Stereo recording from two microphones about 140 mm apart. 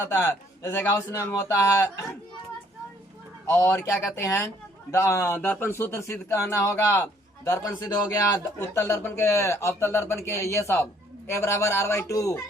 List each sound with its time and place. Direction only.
0.0 s a man's voice: 20° left (ahead or behind)
3.4 s a man's voice: 20° left (ahead or behind)